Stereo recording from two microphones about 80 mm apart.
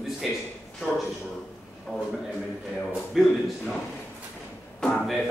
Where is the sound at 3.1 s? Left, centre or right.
Centre.